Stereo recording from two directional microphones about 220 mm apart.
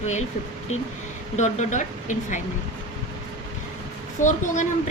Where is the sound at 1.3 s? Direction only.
30° left (ahead or behind).